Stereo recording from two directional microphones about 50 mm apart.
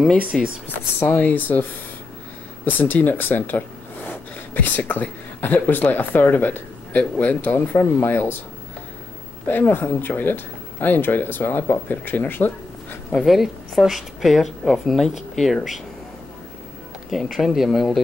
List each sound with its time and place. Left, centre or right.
0.3 s a woman's voice: centre
0.9 s speech: left
7.8 s speech: left
9.5 s speech: left
13.1 s a woman's voice: centre
17.1 s a woman's voice: centre